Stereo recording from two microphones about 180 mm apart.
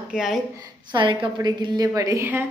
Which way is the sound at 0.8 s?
25° right (ahead or behind).